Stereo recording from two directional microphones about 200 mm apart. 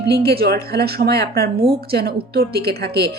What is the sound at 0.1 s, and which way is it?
Speech, 50° right (ahead or behind).